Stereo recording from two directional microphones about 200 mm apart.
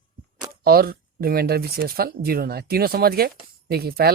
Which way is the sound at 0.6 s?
50° right (ahead or behind).